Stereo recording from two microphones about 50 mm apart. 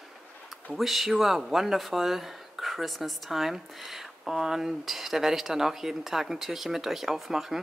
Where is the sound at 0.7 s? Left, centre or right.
Centre.